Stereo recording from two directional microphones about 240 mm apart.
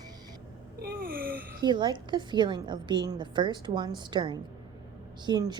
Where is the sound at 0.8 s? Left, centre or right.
Right.